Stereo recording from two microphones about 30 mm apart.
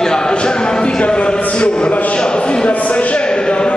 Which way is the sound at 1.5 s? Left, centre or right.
Left.